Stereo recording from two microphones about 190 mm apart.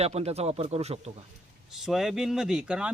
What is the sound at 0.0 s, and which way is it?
A man's voice, 35° right (ahead or behind).